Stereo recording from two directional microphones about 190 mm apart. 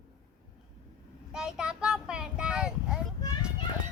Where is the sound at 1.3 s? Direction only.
5° right (ahead or behind).